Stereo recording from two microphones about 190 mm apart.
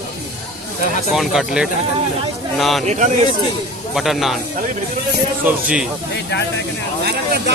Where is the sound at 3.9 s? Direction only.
Centre (ahead or behind).